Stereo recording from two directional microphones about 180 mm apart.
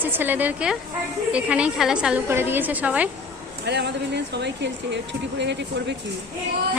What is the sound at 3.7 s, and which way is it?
Speech, 70° right (ahead or behind).